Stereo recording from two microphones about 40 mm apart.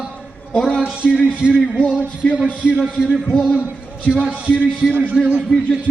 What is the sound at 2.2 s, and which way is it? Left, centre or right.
Speech, centre.